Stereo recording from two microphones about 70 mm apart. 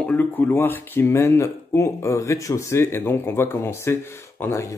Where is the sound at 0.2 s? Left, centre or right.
Left.